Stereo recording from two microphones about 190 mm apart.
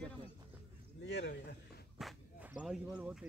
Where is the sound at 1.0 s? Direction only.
65° left (ahead or behind).